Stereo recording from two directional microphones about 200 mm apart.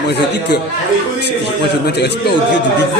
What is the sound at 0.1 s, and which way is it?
A man's voice, 55° left (ahead or behind).